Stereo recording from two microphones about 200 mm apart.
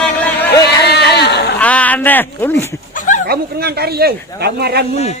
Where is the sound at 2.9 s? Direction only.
40° left (ahead or behind).